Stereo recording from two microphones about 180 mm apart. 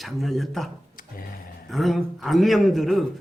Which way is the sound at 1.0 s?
50° left (ahead or behind).